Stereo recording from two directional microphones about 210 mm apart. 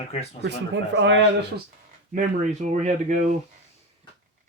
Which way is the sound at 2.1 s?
35° right (ahead or behind).